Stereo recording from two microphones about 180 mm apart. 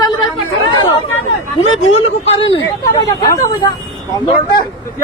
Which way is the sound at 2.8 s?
20° left (ahead or behind).